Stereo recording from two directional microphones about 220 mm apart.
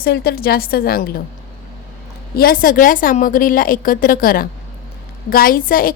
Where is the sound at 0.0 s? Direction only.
45° left (ahead or behind).